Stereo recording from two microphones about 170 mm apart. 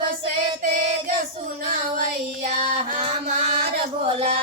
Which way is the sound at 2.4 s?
40° right (ahead or behind).